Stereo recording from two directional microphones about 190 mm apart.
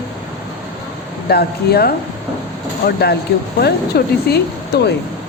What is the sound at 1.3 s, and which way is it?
Speech, 55° left (ahead or behind).